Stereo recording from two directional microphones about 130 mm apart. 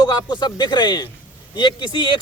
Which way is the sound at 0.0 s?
35° left (ahead or behind).